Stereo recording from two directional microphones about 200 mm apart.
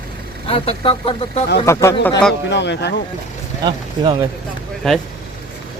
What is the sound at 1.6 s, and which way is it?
Speech, 15° left (ahead or behind).